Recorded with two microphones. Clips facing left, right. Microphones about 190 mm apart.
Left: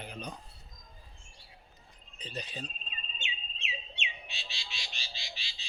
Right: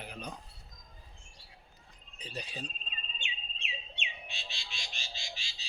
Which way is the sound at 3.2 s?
55° right (ahead or behind).